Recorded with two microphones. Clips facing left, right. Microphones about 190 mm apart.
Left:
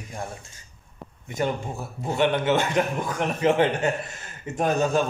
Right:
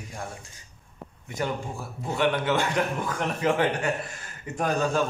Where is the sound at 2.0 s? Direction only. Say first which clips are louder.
Left 2 dB; 20° left (ahead or behind).